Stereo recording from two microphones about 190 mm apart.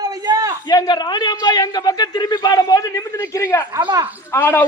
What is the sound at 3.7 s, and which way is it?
Speech, 20° right (ahead or behind).